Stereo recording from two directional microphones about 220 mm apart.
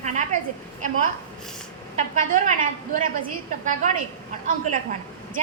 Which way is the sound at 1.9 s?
35° right (ahead or behind).